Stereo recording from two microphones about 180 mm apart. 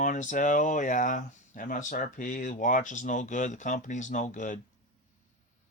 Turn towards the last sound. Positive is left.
turn(degrees=45)  # may be behind; listen again after turning